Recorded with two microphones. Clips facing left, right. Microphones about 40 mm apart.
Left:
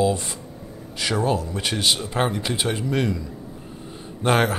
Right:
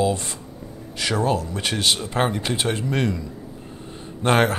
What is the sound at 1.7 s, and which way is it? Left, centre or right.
Speech, centre.